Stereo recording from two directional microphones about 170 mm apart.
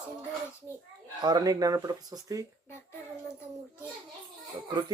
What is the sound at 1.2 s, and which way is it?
Speech, 25° right (ahead or behind).